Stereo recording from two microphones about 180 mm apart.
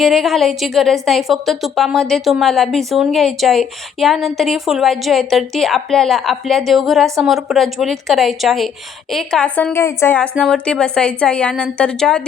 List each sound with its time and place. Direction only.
0.0 s a woman's voice: centre (ahead or behind)